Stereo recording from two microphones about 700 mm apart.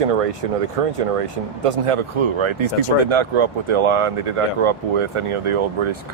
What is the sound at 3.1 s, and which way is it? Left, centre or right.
Speech, right.